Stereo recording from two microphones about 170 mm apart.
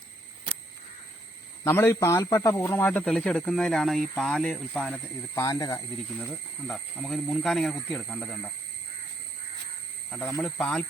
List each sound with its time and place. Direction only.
1.6 s speech: 15° left (ahead or behind)
5.3 s speech: 20° left (ahead or behind)
6.7 s speech: 5° left (ahead or behind)
10.4 s speech: 5° left (ahead or behind)